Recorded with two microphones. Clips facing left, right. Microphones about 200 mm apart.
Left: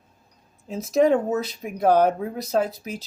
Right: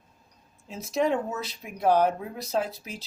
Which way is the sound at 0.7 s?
40° left (ahead or behind).